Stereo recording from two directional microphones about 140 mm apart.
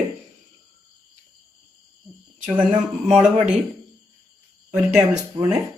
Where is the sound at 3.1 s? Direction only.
5° right (ahead or behind).